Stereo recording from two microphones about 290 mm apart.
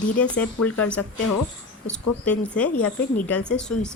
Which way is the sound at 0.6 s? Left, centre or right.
Centre.